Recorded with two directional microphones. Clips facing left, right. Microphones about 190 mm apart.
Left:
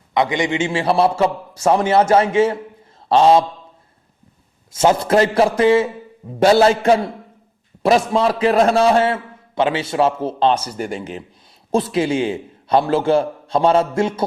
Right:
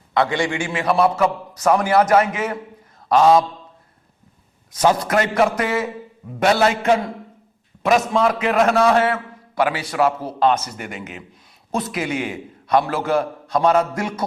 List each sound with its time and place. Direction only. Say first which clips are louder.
0.1 s a man's voice: left 2 dB; 20° left (ahead or behind)
4.7 s a man's voice: left 3 dB; 25° left (ahead or behind)